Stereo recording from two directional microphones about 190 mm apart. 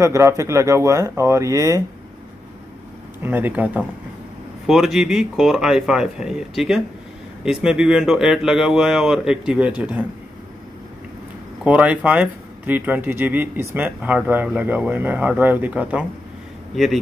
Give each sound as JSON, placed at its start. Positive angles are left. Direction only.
{"t": 0.0, "sound": "speech", "side_deg": -15}
{"t": 3.2, "sound": "speech", "side_deg": -10}
{"t": 11.6, "sound": "speech", "side_deg": -5}